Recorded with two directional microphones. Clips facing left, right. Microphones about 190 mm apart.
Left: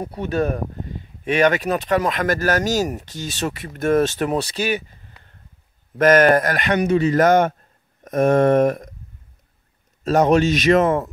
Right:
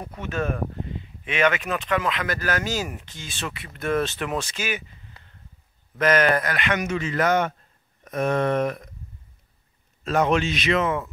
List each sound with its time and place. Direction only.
0.0 s a man's voice: 35° left (ahead or behind)
10.0 s a man's voice: 40° left (ahead or behind)